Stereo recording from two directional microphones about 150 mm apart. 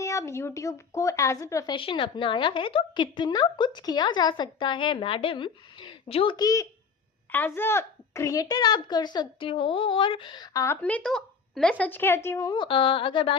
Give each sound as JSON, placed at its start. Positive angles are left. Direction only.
{"t": 0.0, "sound": "a child's voice", "side_deg": 20}
{"t": 1.7, "sound": "a woman's voice", "side_deg": 35}
{"t": 6.3, "sound": "a child's voice", "side_deg": 25}
{"t": 7.3, "sound": "a child's voice", "side_deg": 15}
{"t": 10.8, "sound": "a woman's voice", "side_deg": 10}